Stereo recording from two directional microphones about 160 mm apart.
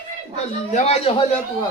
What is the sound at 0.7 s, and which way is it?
Speech, 40° left (ahead or behind).